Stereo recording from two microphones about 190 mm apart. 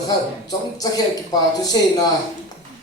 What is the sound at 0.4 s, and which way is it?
A man's voice, 20° left (ahead or behind).